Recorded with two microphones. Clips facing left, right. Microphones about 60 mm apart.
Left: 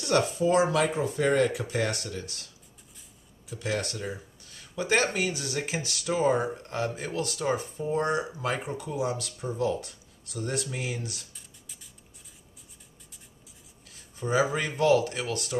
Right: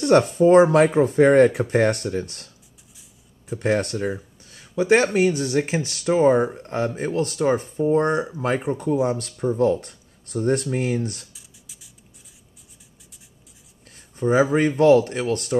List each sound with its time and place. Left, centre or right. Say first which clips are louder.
0.0 s speech: right 9 dB; right
4.5 s a sound: right 10 dB; right
5.1 s speech: right 11 dB; right
11.3 s beatboxing: right 1 dB; centre
13.8 s a sound: right 10 dB; right
14.8 s speech: right 6 dB; right